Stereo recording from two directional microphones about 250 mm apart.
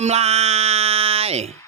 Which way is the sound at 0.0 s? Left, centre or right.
Right.